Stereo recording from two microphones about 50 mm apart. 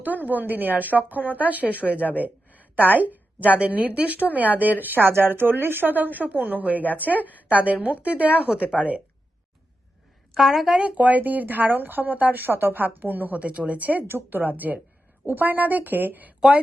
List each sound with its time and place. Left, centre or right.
0.0 s a woman's voice: right
10.3 s speech: centre
10.8 s a woman's voice: right
14.1 s a woman's voice: right